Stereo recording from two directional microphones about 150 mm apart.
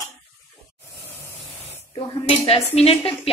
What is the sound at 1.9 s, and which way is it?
Dishes, 40° left (ahead or behind).